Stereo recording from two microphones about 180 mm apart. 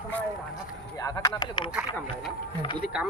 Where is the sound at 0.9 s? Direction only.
20° left (ahead or behind).